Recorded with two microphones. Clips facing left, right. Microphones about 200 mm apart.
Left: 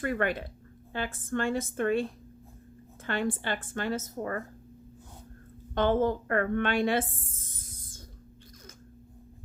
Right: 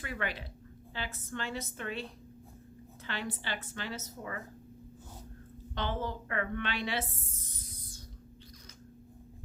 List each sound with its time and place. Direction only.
0.0 s a woman's voice: 50° left (ahead or behind)
3.1 s a woman's voice: 50° left (ahead or behind)
5.7 s a woman's voice: 50° left (ahead or behind)